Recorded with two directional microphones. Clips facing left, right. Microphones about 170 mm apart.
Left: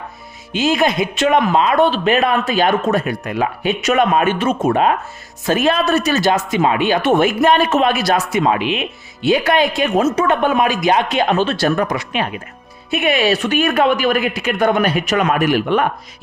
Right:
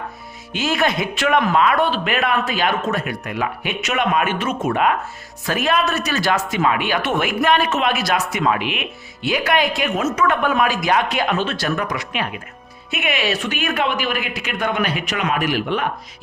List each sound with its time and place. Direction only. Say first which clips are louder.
0.6 s a man's voice: left 4 dB; 15° left (ahead or behind); by 15.9 s 50° left (ahead or behind)